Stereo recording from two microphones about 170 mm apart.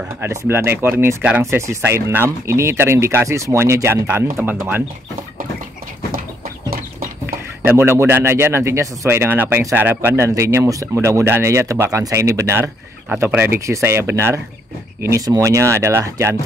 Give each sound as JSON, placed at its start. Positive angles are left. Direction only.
{"t": 0.2, "sound": "speech", "side_deg": -15}
{"t": 6.7, "sound": "horse", "side_deg": -60}
{"t": 7.6, "sound": "speech", "side_deg": -15}